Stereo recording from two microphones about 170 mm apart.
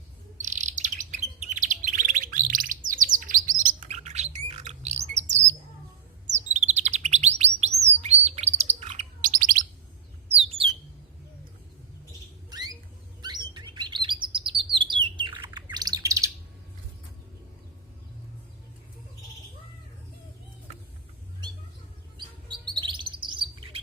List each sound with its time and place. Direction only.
0.4 s bird: 45° right (ahead or behind)
9.2 s bird: 50° right (ahead or behind)
12.5 s a sound: 25° right (ahead or behind)
13.2 s chirp: 25° right (ahead or behind)
15.7 s bird: 20° right (ahead or behind)
22.2 s chirp: 25° right (ahead or behind)